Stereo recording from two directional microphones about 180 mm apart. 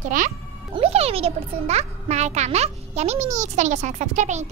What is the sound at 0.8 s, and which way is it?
A child's voice, 35° right (ahead or behind).